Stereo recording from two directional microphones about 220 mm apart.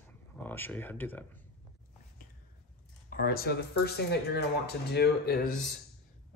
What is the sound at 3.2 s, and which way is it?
Speech, 45° left (ahead or behind).